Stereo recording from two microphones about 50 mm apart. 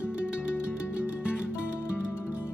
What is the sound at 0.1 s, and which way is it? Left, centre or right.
Music, left.